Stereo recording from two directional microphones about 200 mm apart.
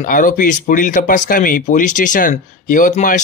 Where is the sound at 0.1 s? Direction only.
45° left (ahead or behind).